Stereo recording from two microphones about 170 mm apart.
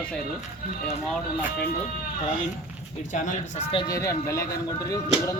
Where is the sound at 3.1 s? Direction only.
45° left (ahead or behind).